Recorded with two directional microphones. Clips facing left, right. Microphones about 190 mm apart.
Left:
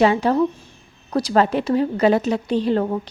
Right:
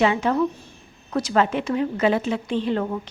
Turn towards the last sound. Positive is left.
turn(degrees=35)  # may be behind; listen again after turning